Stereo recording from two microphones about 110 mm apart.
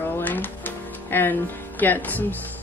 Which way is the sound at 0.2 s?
15° left (ahead or behind).